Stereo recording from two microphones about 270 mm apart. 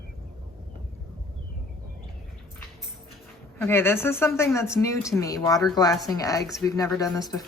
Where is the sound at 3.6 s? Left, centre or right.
Centre.